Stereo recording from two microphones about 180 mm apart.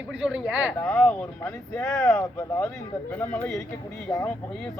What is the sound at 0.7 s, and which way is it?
Speech, 10° left (ahead or behind).